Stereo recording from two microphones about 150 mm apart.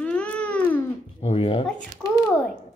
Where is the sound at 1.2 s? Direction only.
35° left (ahead or behind).